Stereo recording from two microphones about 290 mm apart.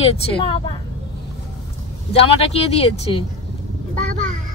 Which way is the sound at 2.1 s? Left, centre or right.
Centre.